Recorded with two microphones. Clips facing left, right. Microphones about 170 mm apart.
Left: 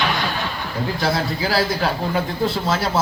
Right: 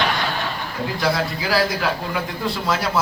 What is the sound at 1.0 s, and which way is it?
A man's voice, 30° left (ahead or behind).